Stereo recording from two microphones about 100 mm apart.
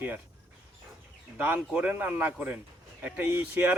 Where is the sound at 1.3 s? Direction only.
15° right (ahead or behind).